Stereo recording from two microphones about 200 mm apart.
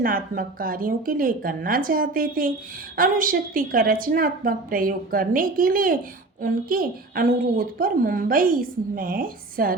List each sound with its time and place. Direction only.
0.0 s a woman's voice: 45° right (ahead or behind)